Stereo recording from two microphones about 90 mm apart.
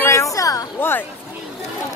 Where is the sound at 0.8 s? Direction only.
25° left (ahead or behind).